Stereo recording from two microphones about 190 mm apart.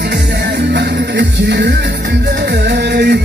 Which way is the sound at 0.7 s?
60° right (ahead or behind).